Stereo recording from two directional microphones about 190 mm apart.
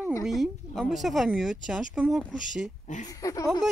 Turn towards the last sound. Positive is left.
turn(degrees=20)  # may be behind; listen again after turning